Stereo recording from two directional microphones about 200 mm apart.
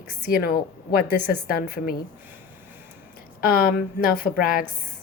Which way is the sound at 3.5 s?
45° left (ahead or behind).